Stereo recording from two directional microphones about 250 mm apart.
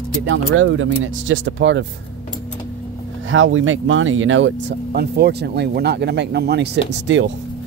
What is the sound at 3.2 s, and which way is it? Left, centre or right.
Speech, right.